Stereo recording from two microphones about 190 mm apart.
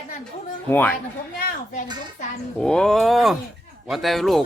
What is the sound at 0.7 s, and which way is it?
Speech, 10° left (ahead or behind).